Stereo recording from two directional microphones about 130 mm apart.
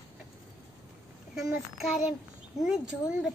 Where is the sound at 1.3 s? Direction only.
5° right (ahead or behind).